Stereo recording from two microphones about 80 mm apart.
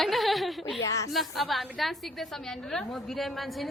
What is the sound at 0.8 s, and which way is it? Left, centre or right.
Speech, left.